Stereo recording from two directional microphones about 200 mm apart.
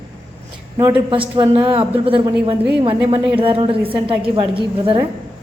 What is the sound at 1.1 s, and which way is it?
A woman's voice, 25° right (ahead or behind).